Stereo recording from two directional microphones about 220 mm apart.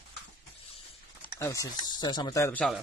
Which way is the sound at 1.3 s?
15° left (ahead or behind).